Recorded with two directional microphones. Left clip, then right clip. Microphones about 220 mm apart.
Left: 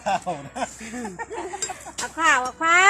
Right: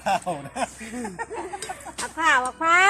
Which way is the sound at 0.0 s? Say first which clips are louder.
Even; 30° right (ahead or behind).